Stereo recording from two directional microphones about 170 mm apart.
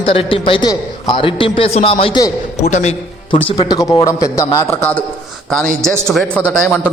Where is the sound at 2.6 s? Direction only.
45° left (ahead or behind).